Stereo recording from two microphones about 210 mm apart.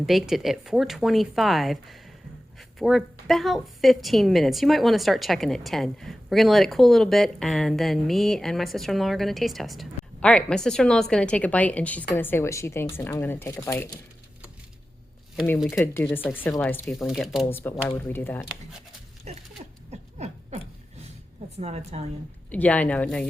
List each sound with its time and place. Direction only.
0.0 s a woman's voice: centre (ahead or behind); by 14.0 s 15° left (ahead or behind)
15.8 s speech: 10° left (ahead or behind)
17.4 s speech: 10° left (ahead or behind)
19.3 s a sound: 30° right (ahead or behind)
21.6 s a woman's voice: 30° right (ahead or behind)
22.5 s speech: 5° left (ahead or behind)